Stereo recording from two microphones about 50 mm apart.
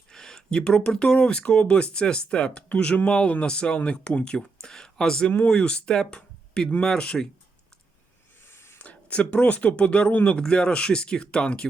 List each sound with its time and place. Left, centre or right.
0.1 s speech: centre
8.4 s a sound: left
8.8 s speech: left
10.4 s speech: centre